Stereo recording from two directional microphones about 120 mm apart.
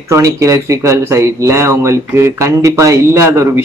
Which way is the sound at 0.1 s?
25° right (ahead or behind).